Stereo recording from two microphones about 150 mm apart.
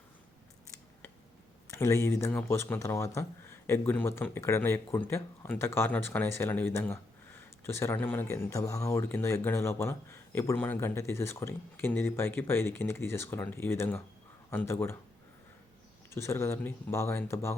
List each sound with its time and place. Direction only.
1.6 s speech: 20° left (ahead or behind)
16.1 s speech: 15° left (ahead or behind)